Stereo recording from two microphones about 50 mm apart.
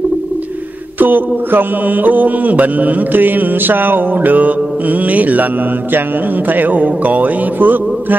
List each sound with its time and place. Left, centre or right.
0.9 s mantra: right